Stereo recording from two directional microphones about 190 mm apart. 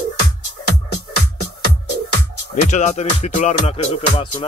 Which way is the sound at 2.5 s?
40° left (ahead or behind).